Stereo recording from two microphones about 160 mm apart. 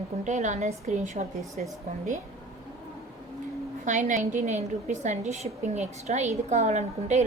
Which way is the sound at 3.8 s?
50° right (ahead or behind).